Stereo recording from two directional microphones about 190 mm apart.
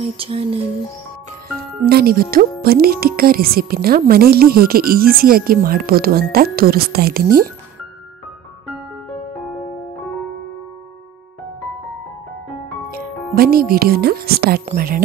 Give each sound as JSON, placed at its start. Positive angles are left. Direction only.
{"t": 0.0, "sound": "music", "side_deg": -30}
{"t": 1.9, "sound": "speech", "side_deg": -55}
{"t": 12.9, "sound": "speech", "side_deg": -50}